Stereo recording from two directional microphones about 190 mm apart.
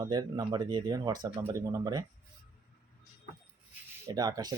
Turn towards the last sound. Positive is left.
turn(degrees=-20)  # may be behind; listen again after turning